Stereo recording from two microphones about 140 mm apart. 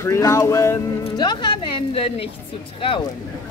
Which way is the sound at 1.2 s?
30° left (ahead or behind).